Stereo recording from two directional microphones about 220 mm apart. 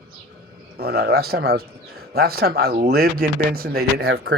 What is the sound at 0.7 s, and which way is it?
Speech, 45° right (ahead or behind).